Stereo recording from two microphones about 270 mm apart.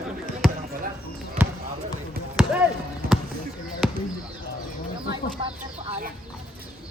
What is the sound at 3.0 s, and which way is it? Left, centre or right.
Basketball bounce, right.